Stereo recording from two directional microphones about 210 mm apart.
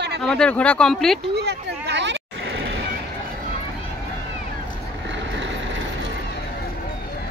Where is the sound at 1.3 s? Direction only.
55° right (ahead or behind).